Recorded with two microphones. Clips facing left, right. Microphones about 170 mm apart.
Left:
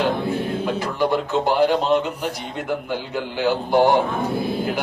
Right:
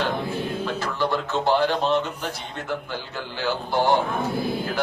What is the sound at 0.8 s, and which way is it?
Music, 15° left (ahead or behind).